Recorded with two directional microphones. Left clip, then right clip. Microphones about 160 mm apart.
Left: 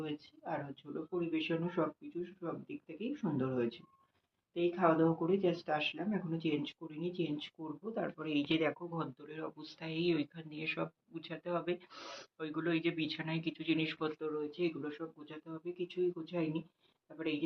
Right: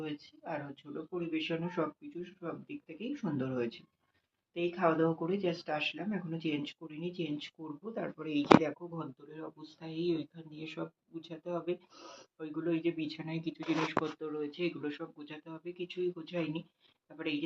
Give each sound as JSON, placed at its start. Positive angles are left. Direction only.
{"t": 0.0, "sound": "speech", "side_deg": -10}
{"t": 9.0, "sound": "speech", "side_deg": 15}
{"t": 15.6, "sound": "speech", "side_deg": -5}